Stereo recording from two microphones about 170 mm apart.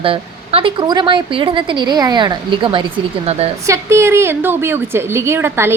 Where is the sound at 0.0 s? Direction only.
30° right (ahead or behind).